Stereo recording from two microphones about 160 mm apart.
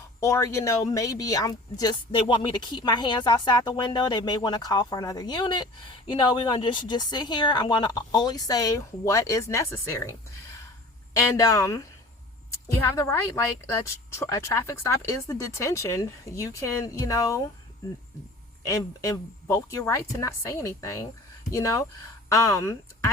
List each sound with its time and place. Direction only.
0.2 s speech: 20° left (ahead or behind)
11.2 s speech: 20° left (ahead or behind)
18.6 s speech: 20° left (ahead or behind)